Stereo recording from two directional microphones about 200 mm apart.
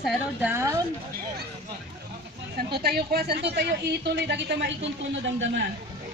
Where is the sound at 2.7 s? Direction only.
50° right (ahead or behind); by 5.5 s 65° right (ahead or behind).